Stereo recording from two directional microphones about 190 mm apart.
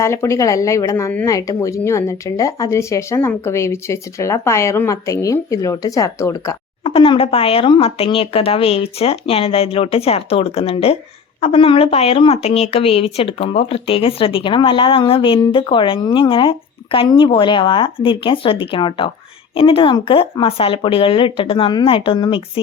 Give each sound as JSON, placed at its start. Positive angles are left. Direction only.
{"t": 0.0, "sound": "speech", "side_deg": 15}
{"t": 6.8, "sound": "speech", "side_deg": 30}